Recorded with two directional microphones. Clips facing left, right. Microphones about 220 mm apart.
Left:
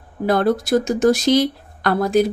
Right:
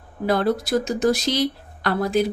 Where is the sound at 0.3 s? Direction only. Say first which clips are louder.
Left 3 dB; 50° left (ahead or behind).